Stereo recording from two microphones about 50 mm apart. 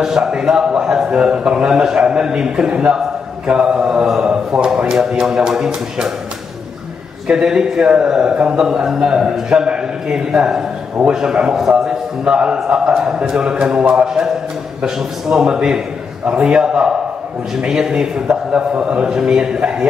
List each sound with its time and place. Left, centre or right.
0.0 s a man's voice: centre
7.2 s a man's voice: centre